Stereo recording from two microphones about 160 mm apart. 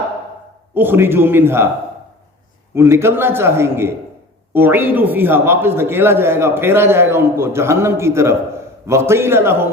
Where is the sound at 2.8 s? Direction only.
15° right (ahead or behind).